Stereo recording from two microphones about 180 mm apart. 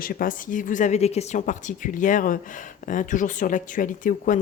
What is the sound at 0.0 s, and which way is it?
Speech, 50° left (ahead or behind).